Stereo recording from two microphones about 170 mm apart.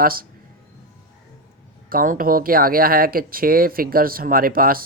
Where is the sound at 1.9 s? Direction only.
55° right (ahead or behind).